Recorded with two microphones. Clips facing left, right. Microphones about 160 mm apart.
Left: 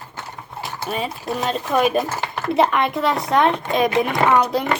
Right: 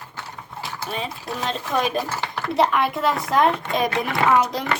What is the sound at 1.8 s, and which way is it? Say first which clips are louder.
Speech: left 5 dB; 50° left (ahead or behind).